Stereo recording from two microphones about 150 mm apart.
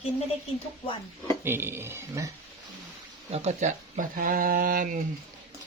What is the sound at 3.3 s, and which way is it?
Speech, 50° right (ahead or behind).